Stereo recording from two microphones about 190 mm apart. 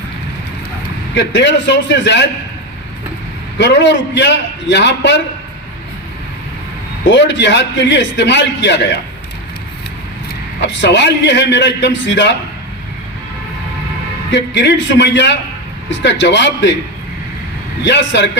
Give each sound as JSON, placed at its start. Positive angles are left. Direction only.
{"t": 1.1, "sound": "a man's voice", "side_deg": 70}
{"t": 3.6, "sound": "a man's voice", "side_deg": 70}
{"t": 7.1, "sound": "a man's voice", "side_deg": 70}
{"t": 10.6, "sound": "a man's voice", "side_deg": 70}
{"t": 14.3, "sound": "a man's voice", "side_deg": 70}
{"t": 17.8, "sound": "a man's voice", "side_deg": 65}